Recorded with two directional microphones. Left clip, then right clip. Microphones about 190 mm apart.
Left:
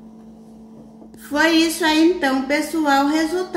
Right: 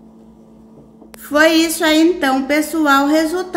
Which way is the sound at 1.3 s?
55° right (ahead or behind).